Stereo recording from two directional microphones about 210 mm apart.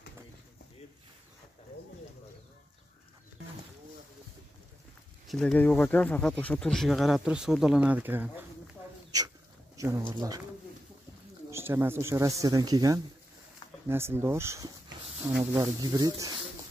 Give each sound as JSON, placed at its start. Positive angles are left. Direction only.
{"t": 5.3, "sound": "speech", "side_deg": 5}
{"t": 11.5, "sound": "speech", "side_deg": -10}